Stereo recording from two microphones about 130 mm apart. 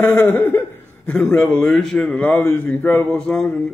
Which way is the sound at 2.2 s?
20° left (ahead or behind).